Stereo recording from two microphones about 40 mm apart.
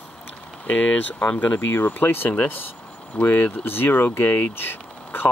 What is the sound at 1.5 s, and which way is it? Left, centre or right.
Speech, left.